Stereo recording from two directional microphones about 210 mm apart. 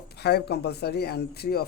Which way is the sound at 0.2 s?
50° left (ahead or behind).